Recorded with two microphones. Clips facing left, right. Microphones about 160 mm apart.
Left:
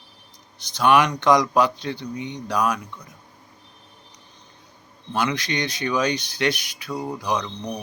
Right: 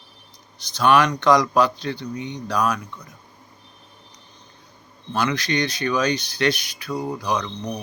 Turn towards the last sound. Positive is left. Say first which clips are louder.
# right 1 dB
turn(degrees=10)  # may be behind; listen again after turning